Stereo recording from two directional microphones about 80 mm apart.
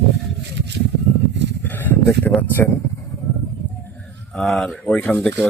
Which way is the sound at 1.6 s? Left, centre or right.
Left.